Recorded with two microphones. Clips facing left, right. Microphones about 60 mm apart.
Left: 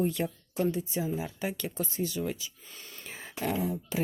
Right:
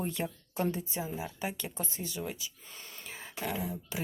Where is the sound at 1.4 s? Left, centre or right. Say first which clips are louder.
Left 4 dB; centre.